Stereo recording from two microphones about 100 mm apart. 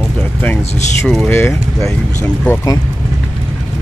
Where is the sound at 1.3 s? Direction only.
20° left (ahead or behind).